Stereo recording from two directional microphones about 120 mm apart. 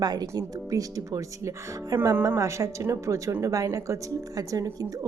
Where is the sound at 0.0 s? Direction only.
35° right (ahead or behind).